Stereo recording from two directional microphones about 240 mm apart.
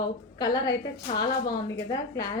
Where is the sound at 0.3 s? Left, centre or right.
Centre.